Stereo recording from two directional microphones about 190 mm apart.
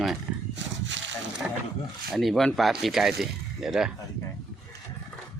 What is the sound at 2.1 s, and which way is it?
Speech, centre (ahead or behind).